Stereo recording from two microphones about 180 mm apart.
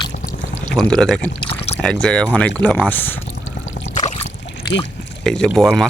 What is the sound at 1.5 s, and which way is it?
Rowboat, 35° left (ahead or behind).